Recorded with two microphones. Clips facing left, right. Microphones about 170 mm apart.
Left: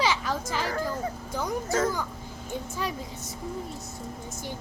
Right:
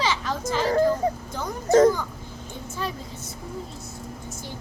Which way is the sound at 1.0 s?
30° right (ahead or behind).